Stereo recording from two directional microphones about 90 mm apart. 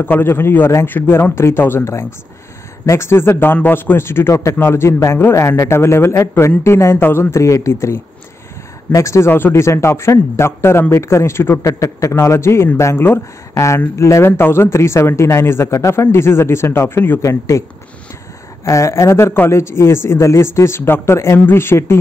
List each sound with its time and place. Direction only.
0.0 s a man's voice: 25° left (ahead or behind)
17.2 s a man's voice: 35° left (ahead or behind)